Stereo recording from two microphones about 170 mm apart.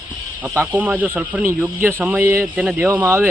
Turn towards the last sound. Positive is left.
turn(degrees=-10)  # may be behind; listen again after turning